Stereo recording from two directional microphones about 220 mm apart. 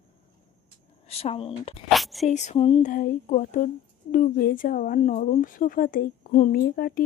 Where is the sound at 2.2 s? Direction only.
30° left (ahead or behind).